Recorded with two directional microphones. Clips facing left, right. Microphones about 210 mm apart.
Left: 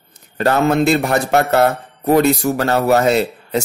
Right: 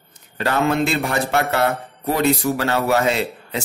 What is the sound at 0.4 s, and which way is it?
A man's voice, 45° left (ahead or behind).